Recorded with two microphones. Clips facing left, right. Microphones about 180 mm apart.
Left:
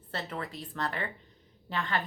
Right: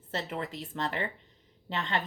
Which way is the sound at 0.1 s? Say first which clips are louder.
Right 2 dB; 20° right (ahead or behind).